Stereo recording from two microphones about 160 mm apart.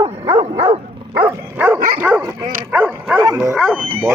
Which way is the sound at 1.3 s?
15° right (ahead or behind).